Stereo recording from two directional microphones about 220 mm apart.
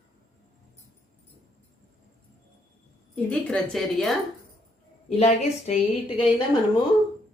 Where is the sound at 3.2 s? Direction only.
5° left (ahead or behind).